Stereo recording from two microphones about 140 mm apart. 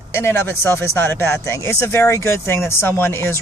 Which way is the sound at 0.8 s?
15° left (ahead or behind).